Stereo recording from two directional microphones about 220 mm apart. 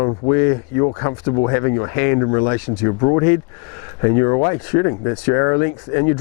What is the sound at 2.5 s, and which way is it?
Speech, 10° left (ahead or behind).